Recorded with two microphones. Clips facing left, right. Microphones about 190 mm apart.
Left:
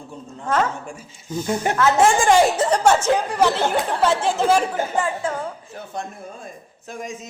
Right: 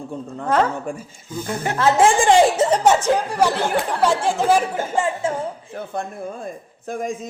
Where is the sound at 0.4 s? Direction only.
35° right (ahead or behind).